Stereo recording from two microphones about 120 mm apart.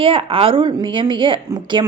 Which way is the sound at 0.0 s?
50° right (ahead or behind).